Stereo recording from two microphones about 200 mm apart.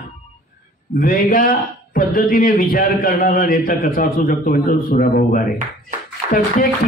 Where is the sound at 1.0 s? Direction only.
45° left (ahead or behind).